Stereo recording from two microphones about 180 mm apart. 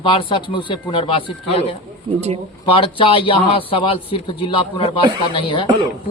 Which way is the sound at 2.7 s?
30° left (ahead or behind).